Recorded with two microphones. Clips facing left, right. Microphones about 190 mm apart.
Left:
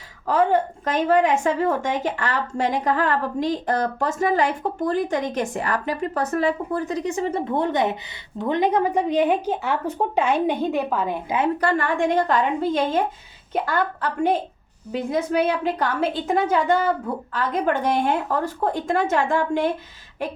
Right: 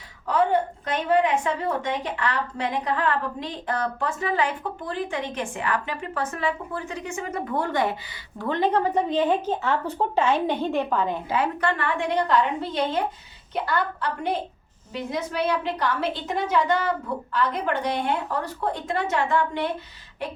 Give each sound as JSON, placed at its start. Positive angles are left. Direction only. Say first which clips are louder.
{"t": 1.0, "sound": "a woman's voice", "louder": "left 3 dB", "side_deg": 45}
{"t": 11.6, "sound": "a woman's voice", "louder": "left 4 dB", "side_deg": 40}